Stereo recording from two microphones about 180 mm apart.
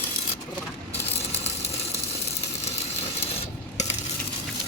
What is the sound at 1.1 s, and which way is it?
Ratchet, 35° left (ahead or behind).